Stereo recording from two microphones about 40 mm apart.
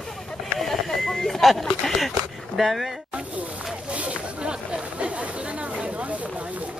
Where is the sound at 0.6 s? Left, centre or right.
Centre.